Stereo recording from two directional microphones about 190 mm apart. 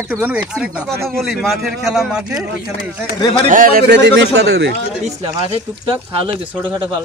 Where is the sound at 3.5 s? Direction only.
45° right (ahead or behind); by 4.7 s 65° right (ahead or behind).